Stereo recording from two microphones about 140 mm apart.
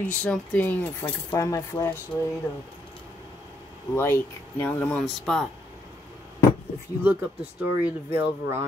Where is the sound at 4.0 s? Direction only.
15° left (ahead or behind).